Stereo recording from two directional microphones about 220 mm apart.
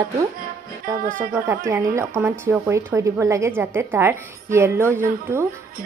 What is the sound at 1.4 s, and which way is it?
Speech, 10° right (ahead or behind).